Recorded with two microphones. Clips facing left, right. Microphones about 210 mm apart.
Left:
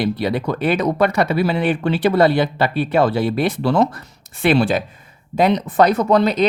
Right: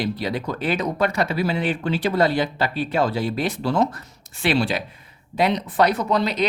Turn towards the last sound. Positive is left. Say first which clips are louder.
# left 6 dB
turn(degrees=45)  # may be behind; listen again after turning